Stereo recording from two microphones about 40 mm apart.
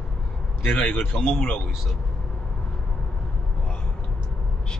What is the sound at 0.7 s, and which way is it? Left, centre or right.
Speech, left.